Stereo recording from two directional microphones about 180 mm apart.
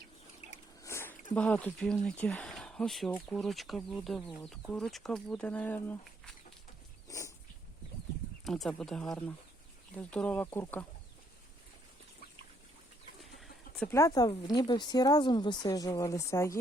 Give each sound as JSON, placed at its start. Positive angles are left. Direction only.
{"t": 0.8, "sound": "a sound", "side_deg": 15}
{"t": 1.4, "sound": "speech", "side_deg": 10}
{"t": 7.1, "sound": "dog", "side_deg": 15}
{"t": 8.4, "sound": "speech", "side_deg": 0}
{"t": 13.4, "sound": "a sound", "side_deg": 5}
{"t": 13.9, "sound": "speech", "side_deg": 20}